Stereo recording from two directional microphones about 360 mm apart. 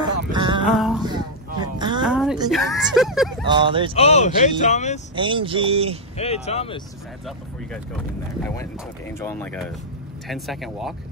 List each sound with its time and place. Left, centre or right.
0.3 s music: centre
0.7 s speech: centre
1.0 s a sound: centre
2.0 s a sound: centre
2.5 s speech: centre
3.4 s speech: centre
3.9 s speech: centre
5.1 s speech: centre
6.1 s speech: centre
7.2 s speech: centre
9.2 s speech: centre